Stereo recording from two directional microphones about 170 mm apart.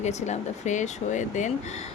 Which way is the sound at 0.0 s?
40° left (ahead or behind).